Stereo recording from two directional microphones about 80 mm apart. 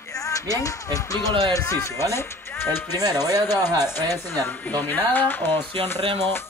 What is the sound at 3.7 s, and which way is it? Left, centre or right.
Speech, right.